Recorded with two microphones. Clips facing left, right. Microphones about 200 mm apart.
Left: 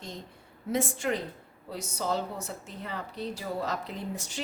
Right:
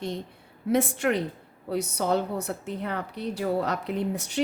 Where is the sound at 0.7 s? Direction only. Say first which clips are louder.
Right 5 dB; 65° right (ahead or behind).